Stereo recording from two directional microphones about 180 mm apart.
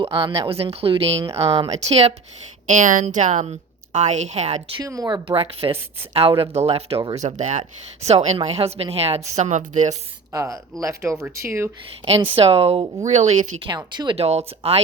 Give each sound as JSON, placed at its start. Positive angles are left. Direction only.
{"t": 0.0, "sound": "a woman's voice", "side_deg": -30}
{"t": 4.8, "sound": "a woman's voice", "side_deg": -20}
{"t": 9.9, "sound": "speech", "side_deg": -20}
{"t": 12.4, "sound": "a woman's voice", "side_deg": -35}
{"t": 13.7, "sound": "a woman's voice", "side_deg": -25}